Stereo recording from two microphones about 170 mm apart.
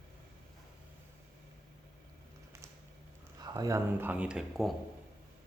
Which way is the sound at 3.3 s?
25° right (ahead or behind).